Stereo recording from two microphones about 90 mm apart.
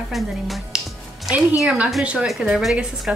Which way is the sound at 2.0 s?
10° right (ahead or behind).